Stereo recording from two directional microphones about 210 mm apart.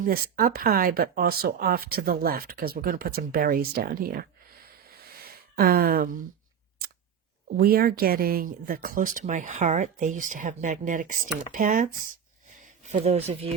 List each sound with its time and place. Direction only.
0.0 s speech: 45° right (ahead or behind)
5.0 s a sound: 45° right (ahead or behind)
7.5 s speech: 45° right (ahead or behind)